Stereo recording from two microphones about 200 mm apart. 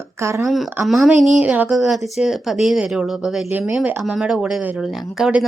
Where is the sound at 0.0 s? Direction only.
15° right (ahead or behind).